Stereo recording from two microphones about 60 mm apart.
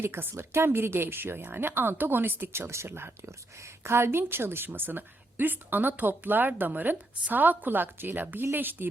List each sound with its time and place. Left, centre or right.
0.0 s a woman's voice: right
2.5 s a woman's voice: right